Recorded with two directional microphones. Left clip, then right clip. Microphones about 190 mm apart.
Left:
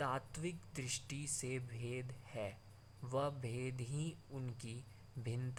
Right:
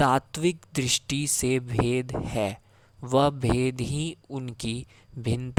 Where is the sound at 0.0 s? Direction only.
45° right (ahead or behind).